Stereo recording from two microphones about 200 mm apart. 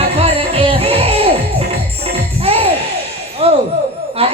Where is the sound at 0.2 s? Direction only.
30° right (ahead or behind).